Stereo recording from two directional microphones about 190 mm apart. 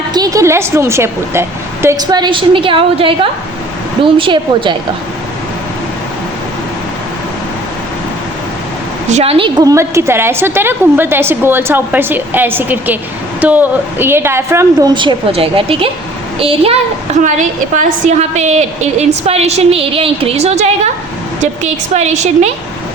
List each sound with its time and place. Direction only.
0.1 s a woman's voice: 20° right (ahead or behind)
9.0 s a woman's voice: 35° right (ahead or behind)
17.2 s a woman's voice: 40° right (ahead or behind)